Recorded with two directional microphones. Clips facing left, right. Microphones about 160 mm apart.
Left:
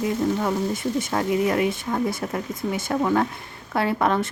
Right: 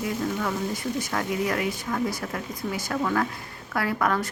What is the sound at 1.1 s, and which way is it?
A woman's voice, 25° left (ahead or behind).